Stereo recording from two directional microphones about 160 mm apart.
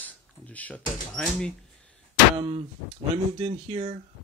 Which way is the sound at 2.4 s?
35° right (ahead or behind).